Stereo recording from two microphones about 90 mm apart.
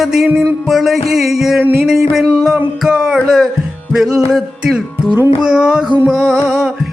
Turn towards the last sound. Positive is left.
turn(degrees=-5)  # may be behind; listen again after turning